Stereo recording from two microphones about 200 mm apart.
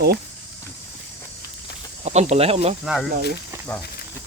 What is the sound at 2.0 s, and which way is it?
Speech, 35° right (ahead or behind).